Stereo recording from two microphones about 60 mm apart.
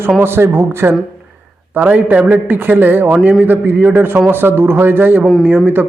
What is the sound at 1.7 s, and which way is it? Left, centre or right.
A man's voice, right.